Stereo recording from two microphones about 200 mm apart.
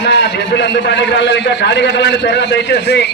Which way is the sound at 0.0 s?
60° left (ahead or behind).